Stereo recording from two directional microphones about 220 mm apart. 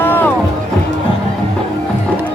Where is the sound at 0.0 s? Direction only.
10° left (ahead or behind).